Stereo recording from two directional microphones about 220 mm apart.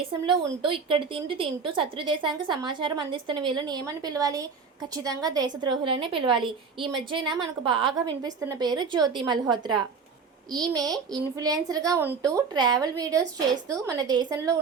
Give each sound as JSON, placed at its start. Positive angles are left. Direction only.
{"t": 0.3, "sound": "a woman's voice", "side_deg": -25}